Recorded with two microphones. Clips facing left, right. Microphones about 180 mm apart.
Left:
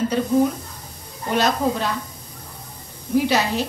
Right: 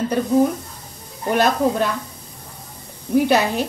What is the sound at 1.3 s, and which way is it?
Speech, 55° right (ahead or behind).